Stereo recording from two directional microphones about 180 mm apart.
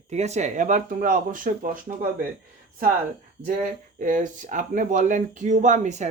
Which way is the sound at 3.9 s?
45° right (ahead or behind).